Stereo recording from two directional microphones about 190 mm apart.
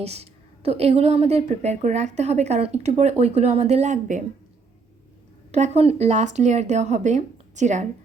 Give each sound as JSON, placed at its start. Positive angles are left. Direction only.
{"t": 0.0, "sound": "a woman's voice", "side_deg": -35}
{"t": 5.5, "sound": "a woman's voice", "side_deg": -35}